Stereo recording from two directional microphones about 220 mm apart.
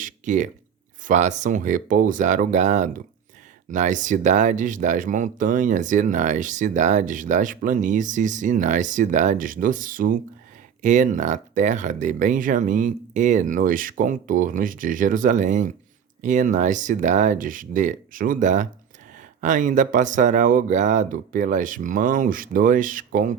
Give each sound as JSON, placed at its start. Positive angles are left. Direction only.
{"t": 0.0, "sound": "speech", "side_deg": -35}